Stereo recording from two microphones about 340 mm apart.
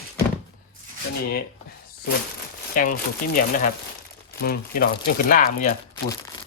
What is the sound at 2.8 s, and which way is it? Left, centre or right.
Speech, left.